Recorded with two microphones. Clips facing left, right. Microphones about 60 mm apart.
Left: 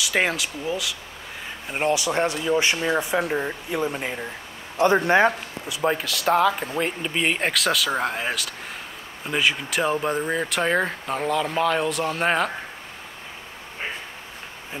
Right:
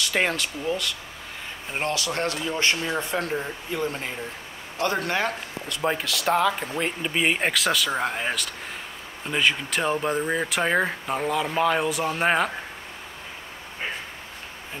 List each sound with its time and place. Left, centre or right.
0.0 s a man's voice: centre; by 5.3 s left
5.7 s speech: centre